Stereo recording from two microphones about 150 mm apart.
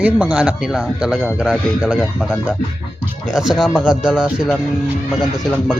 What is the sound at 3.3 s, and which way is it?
Speech, 5° right (ahead or behind).